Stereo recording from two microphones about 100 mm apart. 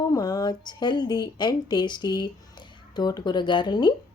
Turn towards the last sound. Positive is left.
turn(degrees=45)  # may be behind; listen again after turning